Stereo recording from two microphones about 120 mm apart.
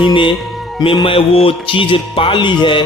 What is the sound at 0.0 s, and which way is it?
Speech, 40° left (ahead or behind).